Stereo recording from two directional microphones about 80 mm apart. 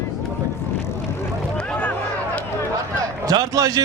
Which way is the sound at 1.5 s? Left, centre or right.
Centre.